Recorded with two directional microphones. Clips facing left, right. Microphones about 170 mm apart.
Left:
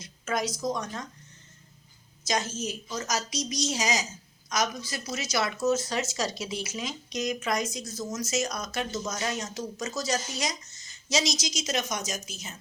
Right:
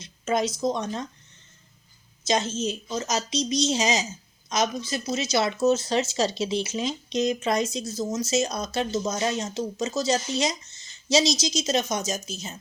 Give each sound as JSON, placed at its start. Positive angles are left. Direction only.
{"t": 0.0, "sound": "speech", "side_deg": -25}
{"t": 2.2, "sound": "speech", "side_deg": -25}